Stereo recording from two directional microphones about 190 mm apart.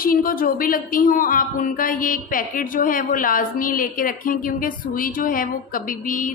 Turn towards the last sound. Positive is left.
turn(degrees=45)  # may be behind; listen again after turning